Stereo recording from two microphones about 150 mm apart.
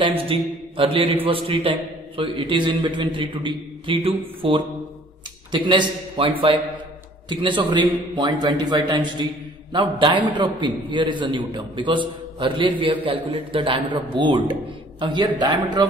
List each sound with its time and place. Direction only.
0.3 s a man's voice: 35° right (ahead or behind)